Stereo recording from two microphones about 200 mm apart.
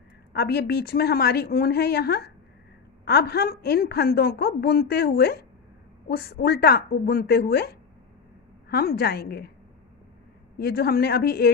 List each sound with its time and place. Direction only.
0.3 s a woman's voice: 50° left (ahead or behind)
10.6 s a woman's voice: 50° left (ahead or behind)